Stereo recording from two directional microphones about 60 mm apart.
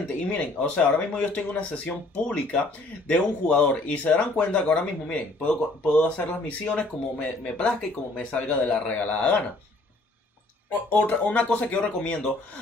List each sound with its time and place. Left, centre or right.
0.3 s speech: left
10.9 s speech: left